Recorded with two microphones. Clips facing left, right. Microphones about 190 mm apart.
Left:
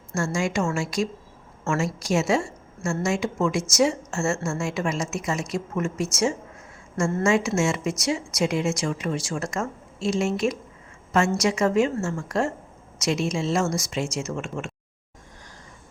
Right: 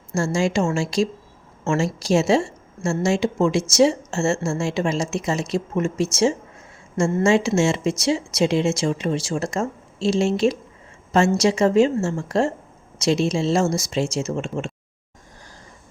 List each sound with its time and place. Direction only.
0.1 s speech: 30° right (ahead or behind)